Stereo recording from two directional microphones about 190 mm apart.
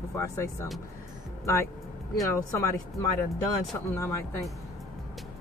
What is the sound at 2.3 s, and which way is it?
Speech, 15° left (ahead or behind).